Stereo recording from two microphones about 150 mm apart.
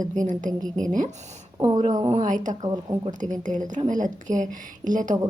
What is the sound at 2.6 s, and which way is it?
Speech, 25° right (ahead or behind).